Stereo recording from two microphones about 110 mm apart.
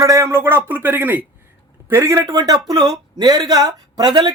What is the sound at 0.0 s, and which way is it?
A man's voice, 30° right (ahead or behind).